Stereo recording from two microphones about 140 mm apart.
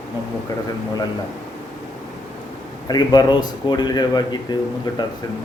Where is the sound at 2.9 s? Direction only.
30° left (ahead or behind).